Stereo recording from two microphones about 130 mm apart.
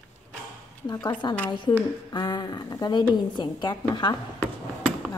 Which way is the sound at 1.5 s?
40° left (ahead or behind).